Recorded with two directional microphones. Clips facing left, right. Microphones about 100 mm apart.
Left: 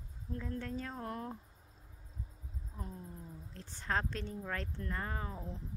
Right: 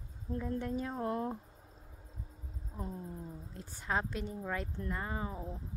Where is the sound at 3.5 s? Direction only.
10° right (ahead or behind).